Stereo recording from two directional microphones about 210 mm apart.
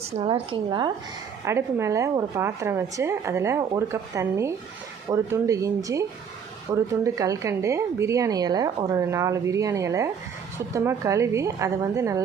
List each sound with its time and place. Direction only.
0.2 s a woman's voice: 20° right (ahead or behind)